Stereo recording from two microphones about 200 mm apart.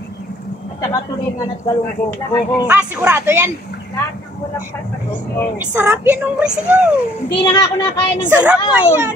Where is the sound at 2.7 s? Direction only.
10° right (ahead or behind).